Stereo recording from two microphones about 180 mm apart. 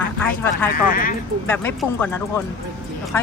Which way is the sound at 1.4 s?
10° left (ahead or behind).